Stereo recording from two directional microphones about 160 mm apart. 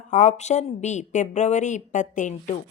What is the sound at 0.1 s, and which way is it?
A woman's voice, 45° left (ahead or behind).